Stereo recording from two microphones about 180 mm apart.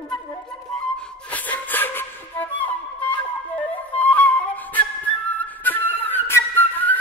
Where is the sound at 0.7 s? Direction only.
5° left (ahead or behind).